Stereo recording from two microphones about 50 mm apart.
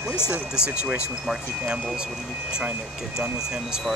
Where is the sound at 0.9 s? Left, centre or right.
Right.